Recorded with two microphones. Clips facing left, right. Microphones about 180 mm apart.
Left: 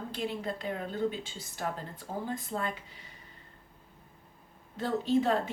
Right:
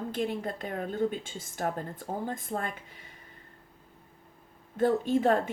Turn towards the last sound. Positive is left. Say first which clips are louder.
# right 2 dB
turn(degrees=-50)  # may be behind; listen again after turning